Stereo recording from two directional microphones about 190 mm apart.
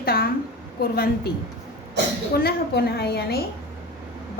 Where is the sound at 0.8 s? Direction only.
55° left (ahead or behind).